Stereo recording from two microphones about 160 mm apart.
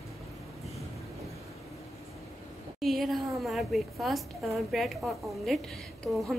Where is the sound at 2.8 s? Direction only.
Centre (ahead or behind).